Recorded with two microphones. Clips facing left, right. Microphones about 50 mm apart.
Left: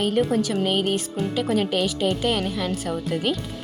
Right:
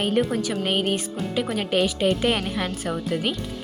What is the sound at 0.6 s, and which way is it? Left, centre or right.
Speech, centre.